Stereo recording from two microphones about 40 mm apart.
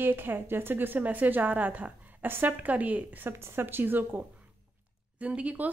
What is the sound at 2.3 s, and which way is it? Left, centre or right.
A woman's voice, right.